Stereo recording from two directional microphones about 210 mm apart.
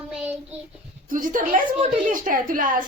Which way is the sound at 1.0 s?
40° right (ahead or behind).